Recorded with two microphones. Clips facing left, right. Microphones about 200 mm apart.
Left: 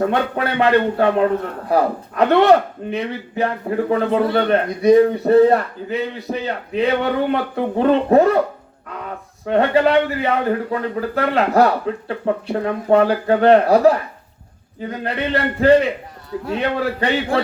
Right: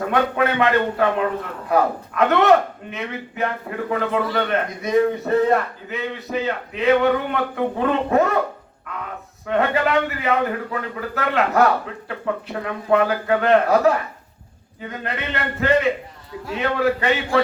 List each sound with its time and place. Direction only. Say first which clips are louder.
0.1 s a man's voice: even; 35° left (ahead or behind)
9.5 s a man's voice: left 5 dB; 30° left (ahead or behind)